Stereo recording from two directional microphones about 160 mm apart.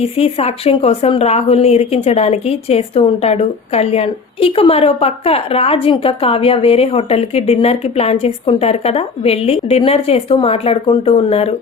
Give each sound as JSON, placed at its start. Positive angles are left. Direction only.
{"t": 0.0, "sound": "a woman's voice", "side_deg": 40}